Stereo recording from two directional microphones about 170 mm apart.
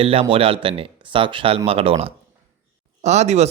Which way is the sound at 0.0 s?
35° right (ahead or behind).